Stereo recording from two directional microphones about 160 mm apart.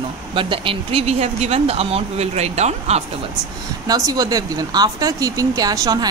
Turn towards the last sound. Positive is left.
turn(degrees=-25)  # may be behind; listen again after turning